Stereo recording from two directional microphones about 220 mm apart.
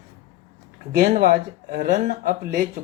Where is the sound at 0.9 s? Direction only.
40° right (ahead or behind).